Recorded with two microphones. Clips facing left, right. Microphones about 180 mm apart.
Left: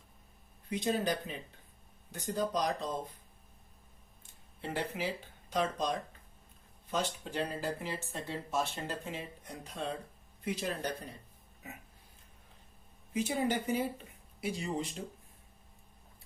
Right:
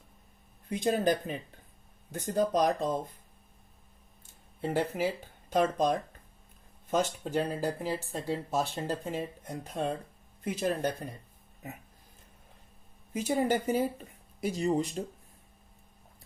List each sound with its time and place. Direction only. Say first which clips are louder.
0.7 s speech: right 5 dB; 50° right (ahead or behind)
4.6 s speech: right 7 dB; 45° right (ahead or behind)
13.1 s speech: right 4 dB; 45° right (ahead or behind)